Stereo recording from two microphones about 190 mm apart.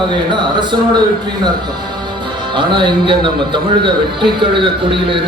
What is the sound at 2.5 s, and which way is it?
A man's voice, 25° right (ahead or behind).